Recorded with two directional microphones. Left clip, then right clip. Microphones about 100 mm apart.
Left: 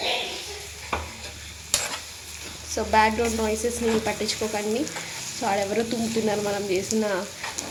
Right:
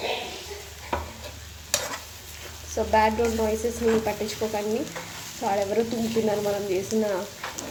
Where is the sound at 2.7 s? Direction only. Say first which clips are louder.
Left 1 dB; 10° left (ahead or behind).